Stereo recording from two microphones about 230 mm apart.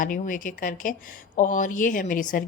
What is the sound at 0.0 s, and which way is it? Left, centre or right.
Speech, left.